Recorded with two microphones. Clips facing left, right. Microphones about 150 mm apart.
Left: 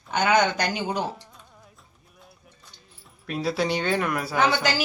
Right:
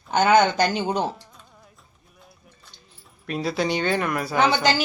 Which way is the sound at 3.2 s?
5° left (ahead or behind).